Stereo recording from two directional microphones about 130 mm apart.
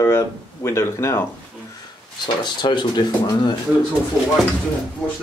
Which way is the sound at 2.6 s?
35° left (ahead or behind).